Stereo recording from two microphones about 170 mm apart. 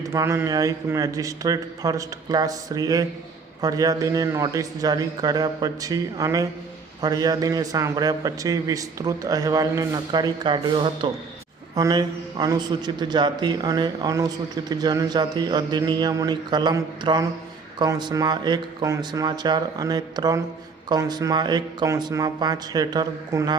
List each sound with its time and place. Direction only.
0.0 s a man's voice: 15° right (ahead or behind)